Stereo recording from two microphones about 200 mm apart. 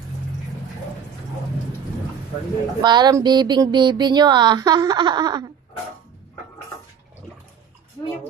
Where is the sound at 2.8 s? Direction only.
20° right (ahead or behind).